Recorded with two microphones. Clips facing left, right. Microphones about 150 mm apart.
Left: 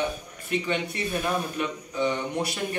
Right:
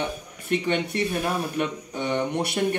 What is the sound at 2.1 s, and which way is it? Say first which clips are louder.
Speech: right 4 dB; 60° right (ahead or behind).